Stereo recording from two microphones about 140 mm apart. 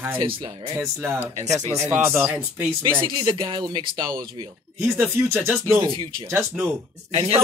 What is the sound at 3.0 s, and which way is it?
Speech, 35° right (ahead or behind).